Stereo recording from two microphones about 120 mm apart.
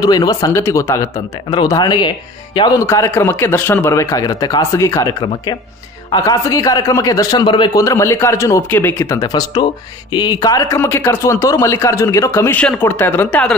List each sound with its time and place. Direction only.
0.0 s speech: 35° left (ahead or behind)
1.5 s a man's voice: 35° left (ahead or behind)
7.8 s speech: 25° left (ahead or behind)
9.1 s speech: 30° left (ahead or behind); by 13.6 s 10° left (ahead or behind)